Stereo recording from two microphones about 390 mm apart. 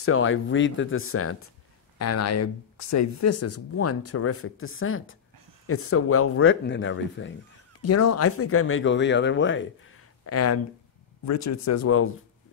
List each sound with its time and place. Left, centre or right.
0.0 s speech: left
7.8 s speech: left